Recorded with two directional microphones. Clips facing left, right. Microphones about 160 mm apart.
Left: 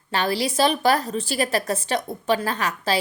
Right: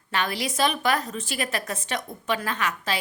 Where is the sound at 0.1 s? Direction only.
30° left (ahead or behind).